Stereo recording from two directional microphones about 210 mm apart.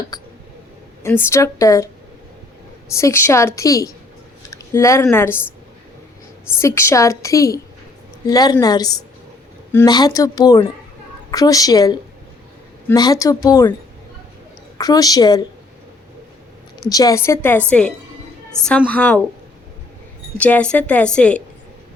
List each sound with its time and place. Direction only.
0.1 s a sound: 15° left (ahead or behind)
1.0 s a woman's voice: 10° left (ahead or behind)
2.9 s a woman's voice: 15° left (ahead or behind)
4.5 s a sound: 15° left (ahead or behind)
5.0 s a woman's voice: 10° left (ahead or behind)
6.6 s a woman's voice: 15° left (ahead or behind)
14.8 s a woman's voice: 15° left (ahead or behind)
16.9 s a woman's voice: 15° left (ahead or behind)
20.4 s a woman's voice: 5° left (ahead or behind)